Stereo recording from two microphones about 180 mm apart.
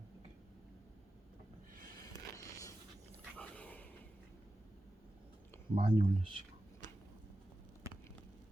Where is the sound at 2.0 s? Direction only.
20° left (ahead or behind).